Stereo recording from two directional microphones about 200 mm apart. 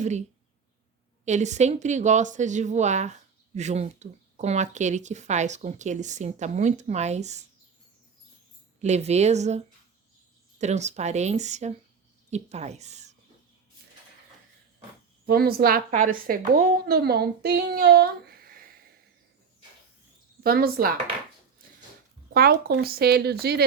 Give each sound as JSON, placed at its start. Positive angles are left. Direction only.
{"t": 0.0, "sound": "speech", "side_deg": -35}
{"t": 8.8, "sound": "speech", "side_deg": -35}
{"t": 10.6, "sound": "speech", "side_deg": -35}
{"t": 15.3, "sound": "a woman's voice", "side_deg": -50}
{"t": 20.4, "sound": "a woman's voice", "side_deg": -50}
{"t": 22.3, "sound": "a sound", "side_deg": -50}
{"t": 22.6, "sound": "a woman's voice", "side_deg": -50}